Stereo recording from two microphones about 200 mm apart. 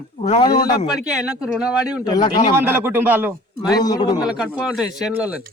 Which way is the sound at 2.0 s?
20° left (ahead or behind).